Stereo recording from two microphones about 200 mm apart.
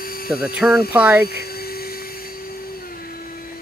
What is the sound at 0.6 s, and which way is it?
Speech, 5° right (ahead or behind).